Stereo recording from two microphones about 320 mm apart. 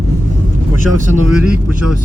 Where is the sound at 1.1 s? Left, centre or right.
Centre.